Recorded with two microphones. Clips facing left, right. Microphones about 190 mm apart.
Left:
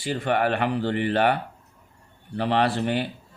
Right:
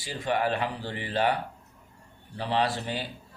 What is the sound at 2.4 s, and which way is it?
Speech, 65° left (ahead or behind).